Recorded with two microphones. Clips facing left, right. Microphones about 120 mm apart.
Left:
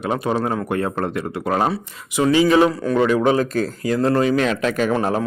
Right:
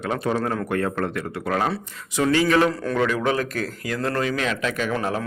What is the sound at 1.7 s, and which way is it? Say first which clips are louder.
Speech: left 3 dB; 10° left (ahead or behind).